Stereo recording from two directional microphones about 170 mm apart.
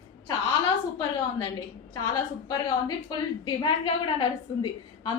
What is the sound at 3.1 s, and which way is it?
A woman's voice, 30° left (ahead or behind).